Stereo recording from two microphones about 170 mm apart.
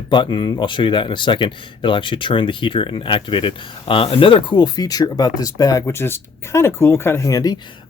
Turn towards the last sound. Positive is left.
turn(degrees=20)  # may be behind; listen again after turning